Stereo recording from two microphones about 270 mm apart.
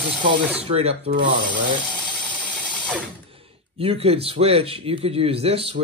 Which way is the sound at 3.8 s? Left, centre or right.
Right.